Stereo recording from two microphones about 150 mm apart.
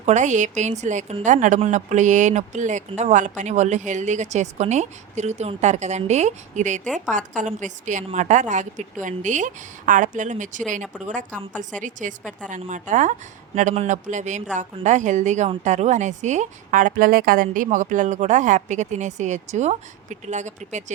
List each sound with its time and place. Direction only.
0.0 s a woman's voice: 50° right (ahead or behind)